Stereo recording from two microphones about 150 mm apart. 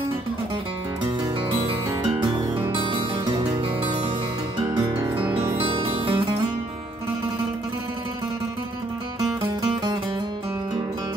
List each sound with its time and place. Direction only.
2.2 s music: 30° right (ahead or behind)
5.9 s music: 35° right (ahead or behind)